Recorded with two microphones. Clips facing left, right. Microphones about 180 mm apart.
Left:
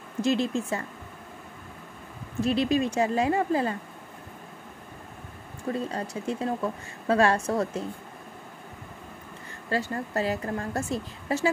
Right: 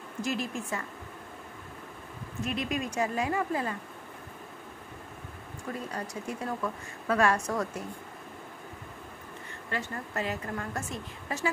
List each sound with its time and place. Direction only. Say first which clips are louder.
0.2 s a woman's voice: left 8 dB; 25° left (ahead or behind)
2.4 s a woman's voice: left 8 dB; 30° left (ahead or behind)
5.7 s a woman's voice: left 6 dB; 30° left (ahead or behind)
9.7 s a woman's voice: left 7 dB; 35° left (ahead or behind)